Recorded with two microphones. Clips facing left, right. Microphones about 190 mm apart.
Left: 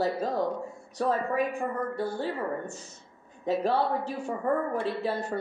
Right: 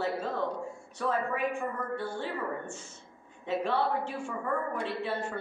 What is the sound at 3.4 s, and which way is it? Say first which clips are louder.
Speech: left 3 dB; 40° left (ahead or behind).